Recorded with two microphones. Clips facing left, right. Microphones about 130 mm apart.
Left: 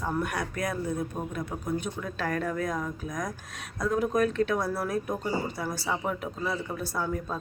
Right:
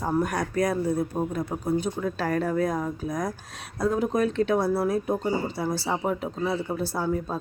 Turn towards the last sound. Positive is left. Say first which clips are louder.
# right 4 dB
turn(degrees=-30)  # may be behind; listen again after turning